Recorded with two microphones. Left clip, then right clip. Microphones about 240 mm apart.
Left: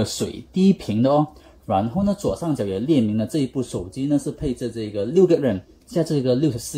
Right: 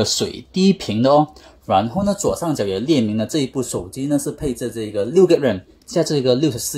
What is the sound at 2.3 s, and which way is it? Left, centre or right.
Speech, right.